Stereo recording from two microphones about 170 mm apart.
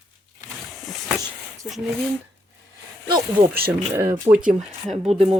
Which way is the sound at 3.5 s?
10° right (ahead or behind).